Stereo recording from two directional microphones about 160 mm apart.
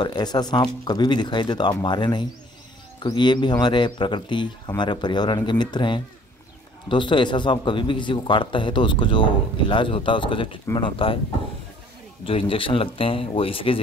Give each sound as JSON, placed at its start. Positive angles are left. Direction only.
{"t": 0.0, "sound": "a man's voice", "side_deg": 25}
{"t": 12.3, "sound": "a man's voice", "side_deg": 35}